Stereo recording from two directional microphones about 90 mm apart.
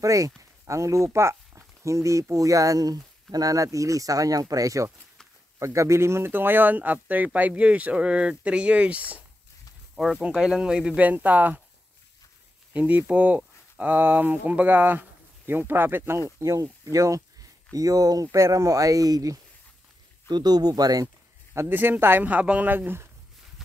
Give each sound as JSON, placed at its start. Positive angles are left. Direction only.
{"t": 0.0, "sound": "speech", "side_deg": -40}
{"t": 10.2, "sound": "speech", "side_deg": -10}
{"t": 12.7, "sound": "speech", "side_deg": -15}
{"t": 21.5, "sound": "speech", "side_deg": -25}